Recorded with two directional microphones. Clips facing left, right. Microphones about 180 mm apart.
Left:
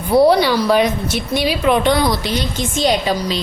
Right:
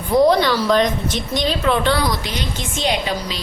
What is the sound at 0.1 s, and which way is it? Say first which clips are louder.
A woman's voice: left 2 dB; 10° left (ahead or behind).